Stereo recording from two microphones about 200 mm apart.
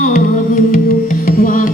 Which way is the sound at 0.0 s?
40° left (ahead or behind).